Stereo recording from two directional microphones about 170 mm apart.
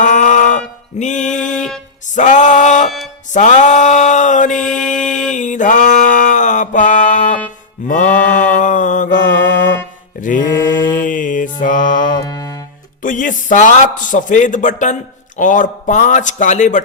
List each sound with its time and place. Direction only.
0.0 s a sound: 45° left (ahead or behind)
0.9 s speech: 45° left (ahead or behind)
1.5 s music: 5° left (ahead or behind)
2.0 s a sound: 45° left (ahead or behind)
4.6 s mantra: 5° left (ahead or behind)
5.3 s a sound: 45° left (ahead or behind)
7.9 s mantra: 50° left (ahead or behind)
12.1 s music: 20° left (ahead or behind)
13.0 s speech: 50° left (ahead or behind)